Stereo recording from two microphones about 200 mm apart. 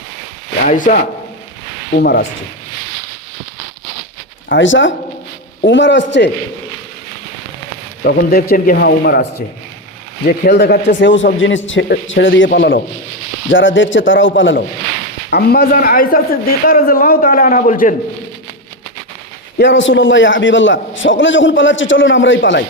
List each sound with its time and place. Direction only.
0.6 s speech: 40° left (ahead or behind)
4.4 s a man's voice: 65° left (ahead or behind)
8.0 s speech: 50° left (ahead or behind)
10.2 s a man's voice: 50° left (ahead or behind); by 14.5 s 70° left (ahead or behind)
15.3 s speech: 50° left (ahead or behind)
19.5 s a man's voice: 65° left (ahead or behind)